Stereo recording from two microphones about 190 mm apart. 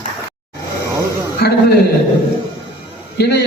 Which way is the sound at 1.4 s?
60° left (ahead or behind).